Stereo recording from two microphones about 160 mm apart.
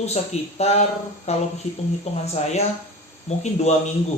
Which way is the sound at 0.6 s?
45° left (ahead or behind).